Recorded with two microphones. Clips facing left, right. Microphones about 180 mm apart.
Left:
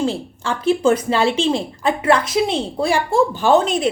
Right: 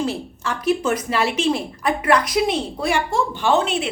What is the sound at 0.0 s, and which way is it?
A woman's voice, 30° left (ahead or behind).